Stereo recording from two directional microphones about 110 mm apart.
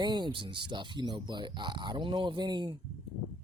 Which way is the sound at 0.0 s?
40° right (ahead or behind).